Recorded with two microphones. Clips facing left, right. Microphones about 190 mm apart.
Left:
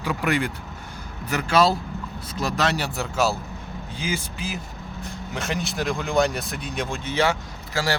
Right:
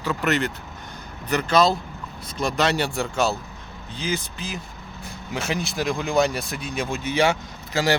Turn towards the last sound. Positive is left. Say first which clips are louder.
# right 4 dB
turn(degrees=-20)  # may be behind; listen again after turning